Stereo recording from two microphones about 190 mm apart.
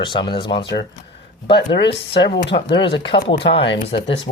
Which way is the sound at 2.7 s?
25° left (ahead or behind).